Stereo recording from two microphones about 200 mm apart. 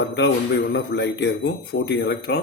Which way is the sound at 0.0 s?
55° left (ahead or behind).